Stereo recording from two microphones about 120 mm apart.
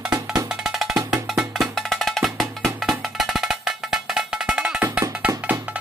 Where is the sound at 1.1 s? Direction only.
5° right (ahead or behind).